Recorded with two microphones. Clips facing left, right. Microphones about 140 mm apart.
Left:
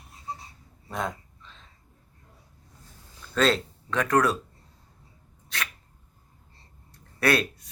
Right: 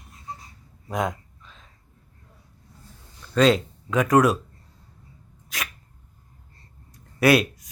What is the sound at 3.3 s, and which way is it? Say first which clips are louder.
Speech: right 5 dB; 5° right (ahead or behind).